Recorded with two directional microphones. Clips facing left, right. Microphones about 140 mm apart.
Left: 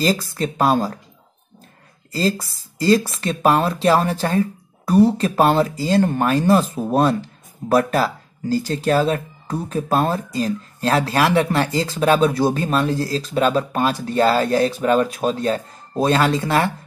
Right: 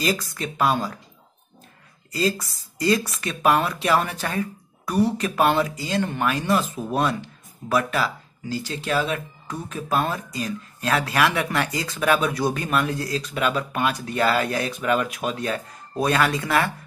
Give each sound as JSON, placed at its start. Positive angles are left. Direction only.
{"t": 0.0, "sound": "speech", "side_deg": 30}
{"t": 2.1, "sound": "speech", "side_deg": 30}